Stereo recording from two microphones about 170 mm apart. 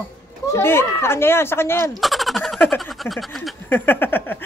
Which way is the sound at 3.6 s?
10° left (ahead or behind).